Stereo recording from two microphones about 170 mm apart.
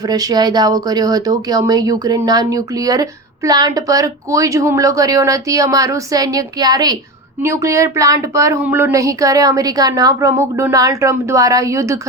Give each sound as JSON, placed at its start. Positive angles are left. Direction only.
{"t": 0.1, "sound": "speech", "side_deg": -20}